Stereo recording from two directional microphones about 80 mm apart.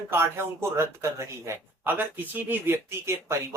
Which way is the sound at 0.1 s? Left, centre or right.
Right.